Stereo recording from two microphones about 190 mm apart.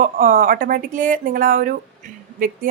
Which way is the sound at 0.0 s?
45° right (ahead or behind).